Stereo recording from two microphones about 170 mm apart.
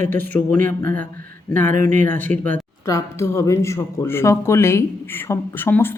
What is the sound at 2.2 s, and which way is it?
Speech, 10° left (ahead or behind).